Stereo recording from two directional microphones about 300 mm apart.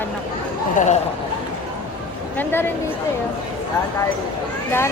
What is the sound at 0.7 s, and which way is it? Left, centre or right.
Speech, left.